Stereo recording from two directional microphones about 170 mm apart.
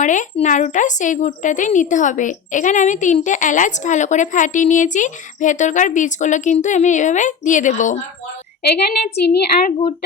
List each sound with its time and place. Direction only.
0.0 s speech: 45° left (ahead or behind)
9.1 s a woman's voice: 75° left (ahead or behind)